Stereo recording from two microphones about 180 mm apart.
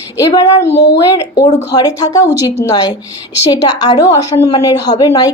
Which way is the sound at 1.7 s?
20° left (ahead or behind).